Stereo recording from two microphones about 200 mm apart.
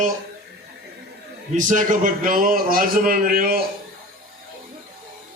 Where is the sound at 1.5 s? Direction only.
40° right (ahead or behind).